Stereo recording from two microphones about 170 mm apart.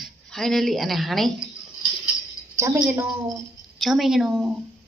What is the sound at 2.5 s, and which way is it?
Speech, 15° right (ahead or behind).